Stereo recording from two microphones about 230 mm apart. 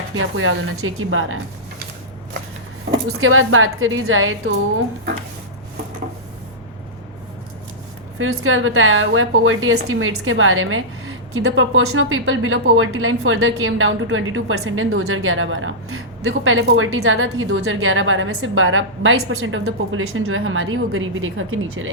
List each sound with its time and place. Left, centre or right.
0.2 s a woman's voice: right
3.1 s a woman's voice: right
8.2 s a woman's voice: right